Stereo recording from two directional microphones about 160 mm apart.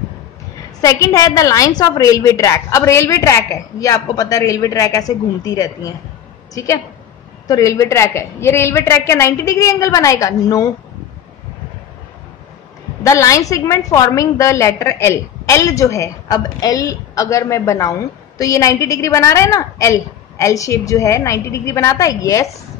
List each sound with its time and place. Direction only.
0.7 s a woman's voice: 20° left (ahead or behind)
13.0 s a woman's voice: 20° left (ahead or behind)